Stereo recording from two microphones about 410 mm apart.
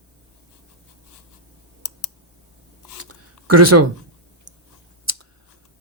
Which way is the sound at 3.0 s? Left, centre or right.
Right.